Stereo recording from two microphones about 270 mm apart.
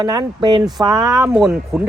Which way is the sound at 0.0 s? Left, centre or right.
Centre.